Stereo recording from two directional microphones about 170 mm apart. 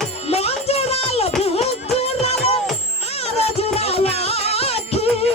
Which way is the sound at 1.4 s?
35° left (ahead or behind).